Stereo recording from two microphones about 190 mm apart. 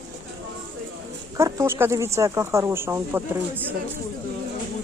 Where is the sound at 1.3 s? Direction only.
15° right (ahead or behind).